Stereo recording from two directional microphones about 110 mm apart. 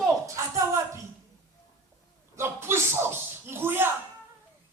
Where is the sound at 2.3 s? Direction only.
20° right (ahead or behind).